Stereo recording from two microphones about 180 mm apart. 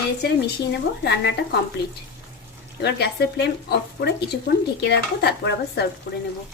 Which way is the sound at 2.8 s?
65° left (ahead or behind).